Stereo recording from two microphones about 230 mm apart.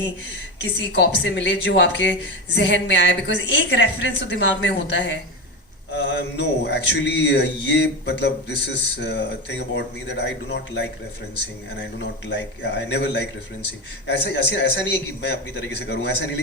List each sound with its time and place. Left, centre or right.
0.6 s speech: left
11.9 s speech: left